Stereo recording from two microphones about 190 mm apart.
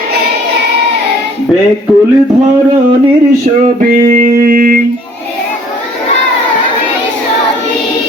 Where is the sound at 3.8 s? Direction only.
50° right (ahead or behind).